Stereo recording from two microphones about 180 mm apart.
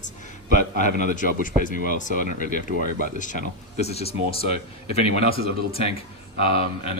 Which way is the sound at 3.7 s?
35° left (ahead or behind).